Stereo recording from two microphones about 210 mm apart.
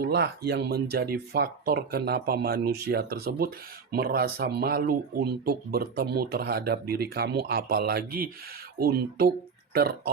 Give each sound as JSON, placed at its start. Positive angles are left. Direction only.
{"t": 0.0, "sound": "speech", "side_deg": -50}